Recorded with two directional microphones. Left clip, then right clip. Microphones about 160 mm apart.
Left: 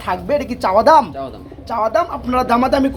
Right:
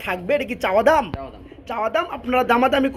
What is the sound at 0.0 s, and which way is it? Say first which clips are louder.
Speech: left 3 dB; 25° right (ahead or behind).